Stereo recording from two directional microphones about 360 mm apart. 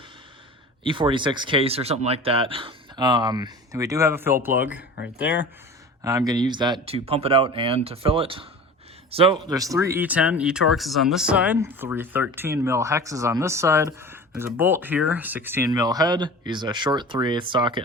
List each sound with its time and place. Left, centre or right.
0.9 s speech: centre